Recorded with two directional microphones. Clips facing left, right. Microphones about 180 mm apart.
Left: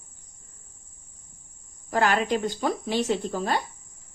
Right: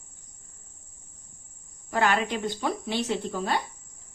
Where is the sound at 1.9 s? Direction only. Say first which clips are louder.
Left 2 dB; 40° left (ahead or behind).